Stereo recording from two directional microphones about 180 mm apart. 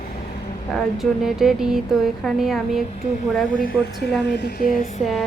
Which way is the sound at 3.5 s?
50° left (ahead or behind).